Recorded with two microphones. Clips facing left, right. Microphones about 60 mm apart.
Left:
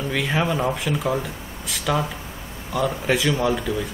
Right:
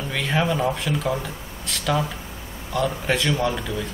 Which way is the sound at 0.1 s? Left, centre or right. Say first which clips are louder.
Even; centre.